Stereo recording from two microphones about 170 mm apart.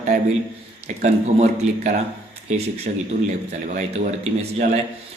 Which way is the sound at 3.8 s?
40° right (ahead or behind).